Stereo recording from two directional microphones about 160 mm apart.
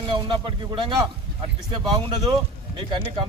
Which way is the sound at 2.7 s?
35° right (ahead or behind).